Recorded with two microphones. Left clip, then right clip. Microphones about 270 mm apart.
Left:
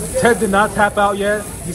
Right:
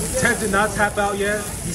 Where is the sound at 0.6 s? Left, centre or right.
Left.